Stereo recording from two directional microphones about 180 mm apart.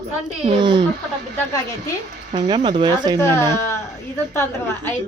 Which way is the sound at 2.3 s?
25° right (ahead or behind).